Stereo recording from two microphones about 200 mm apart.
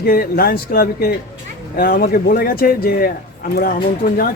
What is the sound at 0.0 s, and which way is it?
Speech, 50° left (ahead or behind).